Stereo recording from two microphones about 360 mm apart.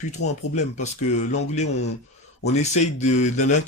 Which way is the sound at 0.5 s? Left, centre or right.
Centre.